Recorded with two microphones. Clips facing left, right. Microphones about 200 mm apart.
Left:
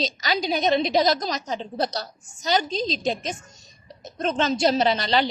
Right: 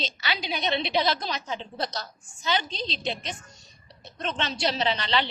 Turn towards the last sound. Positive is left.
turn(degrees=40)  # may be behind; listen again after turning